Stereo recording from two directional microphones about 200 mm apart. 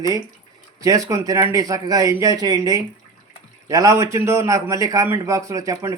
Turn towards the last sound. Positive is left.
turn(degrees=-15)  # may be behind; listen again after turning